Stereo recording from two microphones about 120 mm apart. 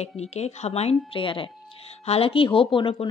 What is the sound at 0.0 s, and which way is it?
A woman's voice, 65° left (ahead or behind).